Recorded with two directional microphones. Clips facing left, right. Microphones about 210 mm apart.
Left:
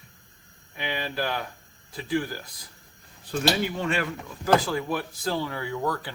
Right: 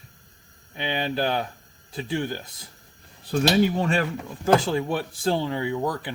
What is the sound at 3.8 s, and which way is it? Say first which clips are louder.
Speech: right 4 dB; 35° right (ahead or behind).